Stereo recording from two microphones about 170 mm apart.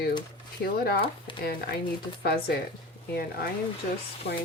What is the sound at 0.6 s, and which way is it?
Speech, 65° left (ahead or behind).